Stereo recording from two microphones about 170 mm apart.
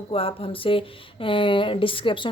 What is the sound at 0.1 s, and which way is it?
Speech, 35° left (ahead or behind).